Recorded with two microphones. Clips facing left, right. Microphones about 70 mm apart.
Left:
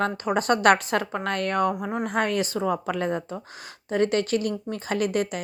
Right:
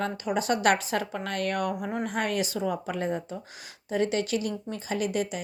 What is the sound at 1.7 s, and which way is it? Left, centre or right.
Speech, left.